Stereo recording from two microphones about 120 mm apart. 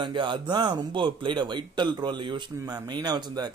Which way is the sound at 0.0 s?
40° right (ahead or behind).